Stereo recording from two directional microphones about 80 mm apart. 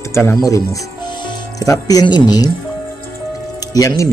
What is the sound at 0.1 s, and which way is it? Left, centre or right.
Speech, left.